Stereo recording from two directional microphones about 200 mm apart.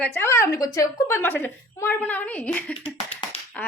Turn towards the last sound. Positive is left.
turn(degrees=5)  # may be behind; listen again after turning